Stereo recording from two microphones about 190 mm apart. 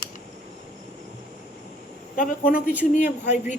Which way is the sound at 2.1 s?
45° left (ahead or behind).